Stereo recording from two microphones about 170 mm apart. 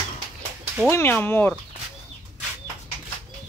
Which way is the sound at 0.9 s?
10° left (ahead or behind).